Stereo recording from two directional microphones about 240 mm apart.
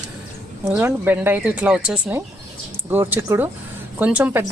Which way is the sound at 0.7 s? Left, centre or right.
Centre.